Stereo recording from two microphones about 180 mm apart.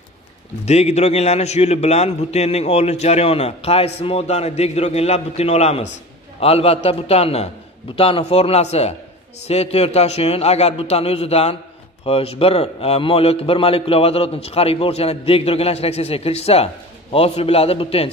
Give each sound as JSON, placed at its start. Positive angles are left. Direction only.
{"t": 0.7, "sound": "a man's voice", "side_deg": 40}